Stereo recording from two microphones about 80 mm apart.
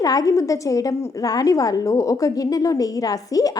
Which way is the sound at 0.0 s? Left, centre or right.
Left.